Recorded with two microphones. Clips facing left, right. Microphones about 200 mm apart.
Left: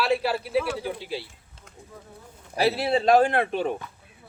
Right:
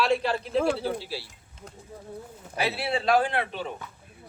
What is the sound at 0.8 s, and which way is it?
Speech, 20° left (ahead or behind).